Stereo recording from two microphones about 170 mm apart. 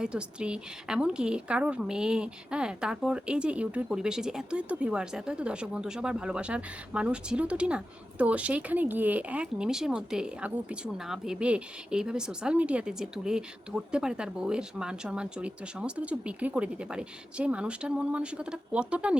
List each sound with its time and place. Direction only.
0.0 s a woman's voice: 5° right (ahead or behind)